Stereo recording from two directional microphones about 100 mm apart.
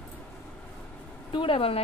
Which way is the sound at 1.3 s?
60° left (ahead or behind).